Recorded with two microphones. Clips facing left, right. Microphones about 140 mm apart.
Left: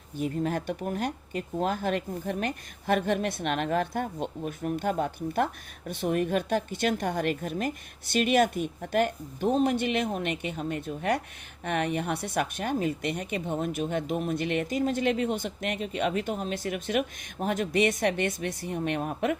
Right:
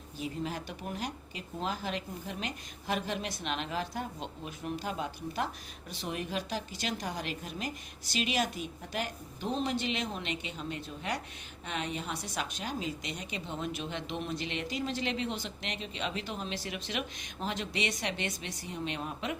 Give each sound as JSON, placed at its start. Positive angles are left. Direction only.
{"t": 0.2, "sound": "a woman's voice", "side_deg": 55}